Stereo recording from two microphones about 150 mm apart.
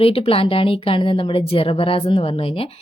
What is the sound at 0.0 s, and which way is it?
A woman's voice, 40° left (ahead or behind).